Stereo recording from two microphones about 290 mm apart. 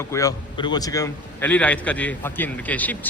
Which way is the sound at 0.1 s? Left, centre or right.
Centre.